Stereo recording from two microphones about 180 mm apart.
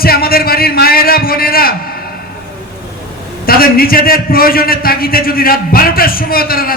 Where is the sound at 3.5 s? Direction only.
55° left (ahead or behind).